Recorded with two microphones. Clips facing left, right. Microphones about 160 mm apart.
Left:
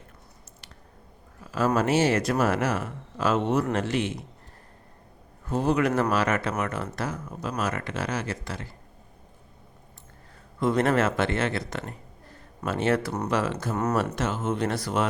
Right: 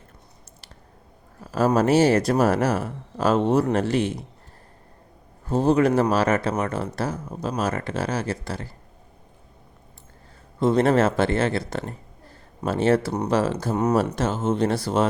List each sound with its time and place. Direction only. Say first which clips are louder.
1.4 s speech: right 4 dB; 40° right (ahead or behind)
5.5 s speech: right 5 dB; 30° right (ahead or behind)
10.6 s speech: right 4 dB; 30° right (ahead or behind)